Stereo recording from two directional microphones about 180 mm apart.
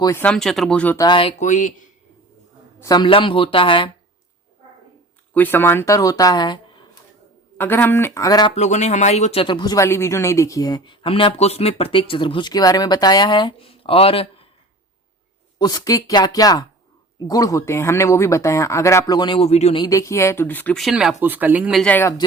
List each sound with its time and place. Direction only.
0.0 s speech: 15° left (ahead or behind)
0.9 s speech: 25° left (ahead or behind)
1.4 s speech: 45° left (ahead or behind)
2.8 s speech: 25° left (ahead or behind)
5.3 s speech: 10° left (ahead or behind)
7.6 s speech: 10° left (ahead or behind)
8.5 s speech: 40° left (ahead or behind)
15.5 s speech: 20° left (ahead or behind)
19.8 s speech: 20° left (ahead or behind); by 21.8 s 10° right (ahead or behind)
21.8 s speech: 10° left (ahead or behind)